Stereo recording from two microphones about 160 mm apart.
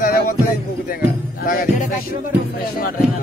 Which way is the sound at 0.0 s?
65° left (ahead or behind).